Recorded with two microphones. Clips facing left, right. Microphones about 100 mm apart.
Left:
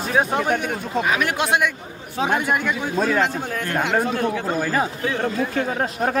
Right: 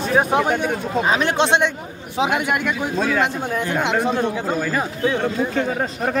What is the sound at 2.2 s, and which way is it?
Speech, 10° right (ahead or behind).